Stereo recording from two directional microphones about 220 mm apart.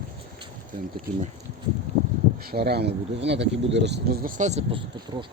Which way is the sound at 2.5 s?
45° right (ahead or behind).